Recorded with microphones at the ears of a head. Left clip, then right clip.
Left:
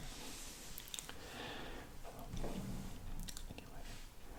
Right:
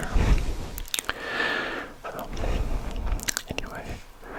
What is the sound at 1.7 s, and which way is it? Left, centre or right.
Crunch, right.